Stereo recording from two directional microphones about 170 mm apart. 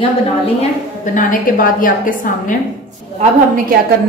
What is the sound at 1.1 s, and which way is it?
A woman's voice, 55° left (ahead or behind).